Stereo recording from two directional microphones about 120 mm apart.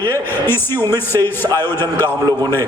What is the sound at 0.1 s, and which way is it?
A man's voice, 20° left (ahead or behind).